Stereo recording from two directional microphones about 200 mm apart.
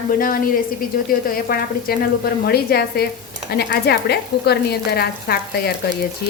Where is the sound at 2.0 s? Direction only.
50° left (ahead or behind).